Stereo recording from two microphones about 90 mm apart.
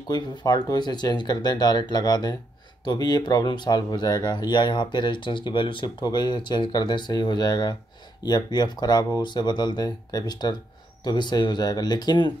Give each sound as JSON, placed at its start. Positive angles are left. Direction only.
{"t": 0.1, "sound": "speech", "side_deg": 45}